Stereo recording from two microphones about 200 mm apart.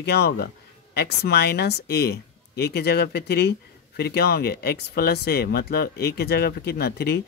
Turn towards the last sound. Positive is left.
turn(degrees=50)  # may be behind; listen again after turning